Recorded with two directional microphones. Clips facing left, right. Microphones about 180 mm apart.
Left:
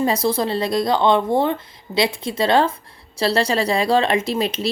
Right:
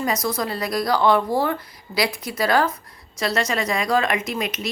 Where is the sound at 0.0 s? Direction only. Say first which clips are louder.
Left 5 dB; 30° left (ahead or behind).